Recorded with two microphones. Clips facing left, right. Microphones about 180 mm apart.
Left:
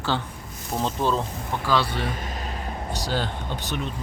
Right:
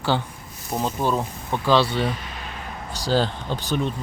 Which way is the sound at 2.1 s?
45° left (ahead or behind).